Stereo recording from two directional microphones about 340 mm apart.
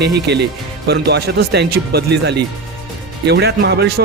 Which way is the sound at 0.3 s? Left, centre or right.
Right.